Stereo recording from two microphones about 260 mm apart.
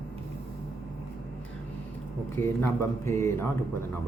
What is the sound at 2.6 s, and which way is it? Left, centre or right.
Speech, centre.